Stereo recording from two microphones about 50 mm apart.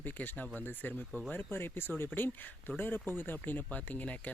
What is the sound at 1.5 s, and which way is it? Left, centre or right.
Speech, left.